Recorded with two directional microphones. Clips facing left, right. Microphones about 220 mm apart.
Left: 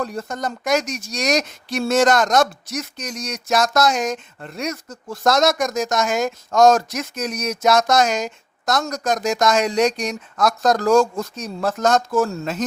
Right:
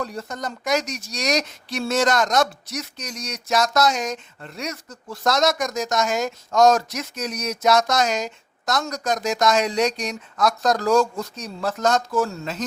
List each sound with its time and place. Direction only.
0.0 s speech: 50° left (ahead or behind)